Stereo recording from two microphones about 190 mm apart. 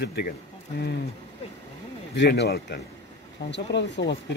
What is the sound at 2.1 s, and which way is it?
A man's voice, 65° left (ahead or behind).